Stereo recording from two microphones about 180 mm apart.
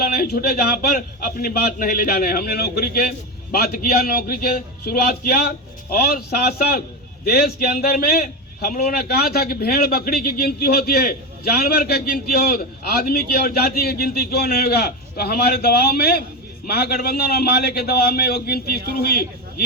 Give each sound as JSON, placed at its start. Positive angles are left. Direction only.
{"t": 0.0, "sound": "a man's voice", "side_deg": 60}